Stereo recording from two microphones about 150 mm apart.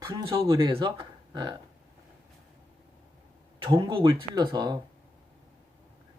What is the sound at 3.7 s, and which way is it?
Speech, 35° right (ahead or behind).